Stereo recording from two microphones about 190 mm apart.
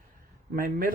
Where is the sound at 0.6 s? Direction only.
50° right (ahead or behind).